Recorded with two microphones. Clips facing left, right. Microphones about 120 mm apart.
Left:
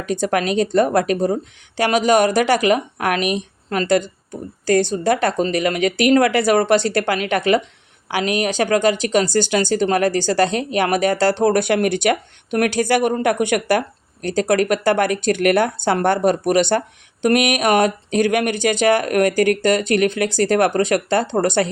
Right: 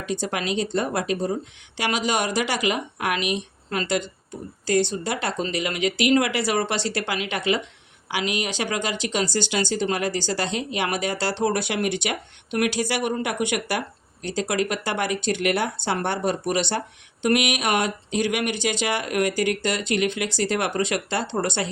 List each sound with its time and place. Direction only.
0.0 s speech: 50° left (ahead or behind)